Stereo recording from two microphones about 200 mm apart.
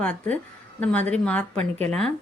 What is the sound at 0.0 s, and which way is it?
A woman's voice, 5° left (ahead or behind).